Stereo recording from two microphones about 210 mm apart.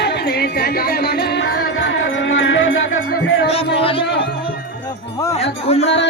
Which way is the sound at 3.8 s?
25° left (ahead or behind).